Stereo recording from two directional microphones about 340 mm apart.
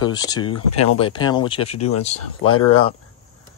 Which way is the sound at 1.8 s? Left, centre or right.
Left.